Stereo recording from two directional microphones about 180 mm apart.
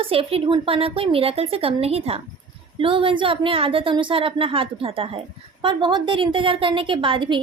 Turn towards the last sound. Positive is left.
turn(degrees=-25)  # may be behind; listen again after turning